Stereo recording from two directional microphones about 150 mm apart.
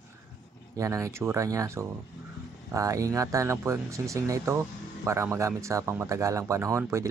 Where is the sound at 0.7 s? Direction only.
20° right (ahead or behind).